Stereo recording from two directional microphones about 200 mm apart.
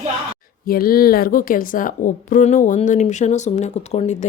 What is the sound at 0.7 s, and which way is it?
A woman's voice, 45° left (ahead or behind).